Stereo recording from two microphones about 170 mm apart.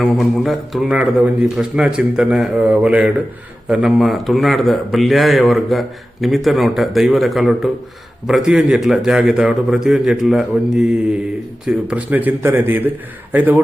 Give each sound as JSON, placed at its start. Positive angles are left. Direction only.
{"t": 0.0, "sound": "a man's voice", "side_deg": 0}